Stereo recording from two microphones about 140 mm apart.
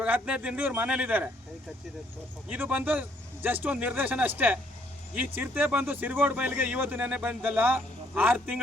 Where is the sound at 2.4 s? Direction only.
10° right (ahead or behind).